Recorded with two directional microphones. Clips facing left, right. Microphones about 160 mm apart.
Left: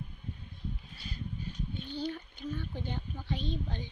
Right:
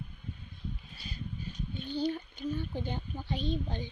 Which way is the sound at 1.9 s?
15° right (ahead or behind).